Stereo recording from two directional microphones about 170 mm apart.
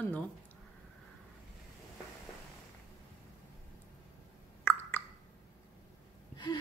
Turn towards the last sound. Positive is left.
turn(degrees=25)  # may be behind; listen again after turning